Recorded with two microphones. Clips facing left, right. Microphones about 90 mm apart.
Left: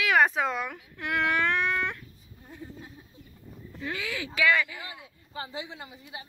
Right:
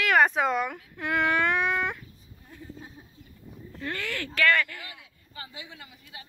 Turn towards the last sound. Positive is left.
turn(degrees=25)  # may be behind; listen again after turning